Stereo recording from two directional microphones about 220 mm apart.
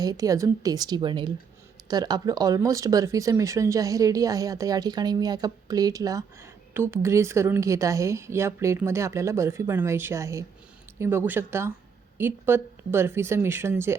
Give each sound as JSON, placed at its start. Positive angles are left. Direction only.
{"t": 0.0, "sound": "speech", "side_deg": -15}